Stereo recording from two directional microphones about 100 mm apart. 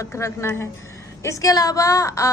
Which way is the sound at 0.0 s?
25° left (ahead or behind).